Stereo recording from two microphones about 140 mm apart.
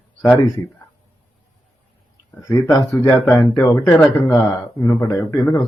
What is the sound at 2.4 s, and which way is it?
Speech, 25° left (ahead or behind).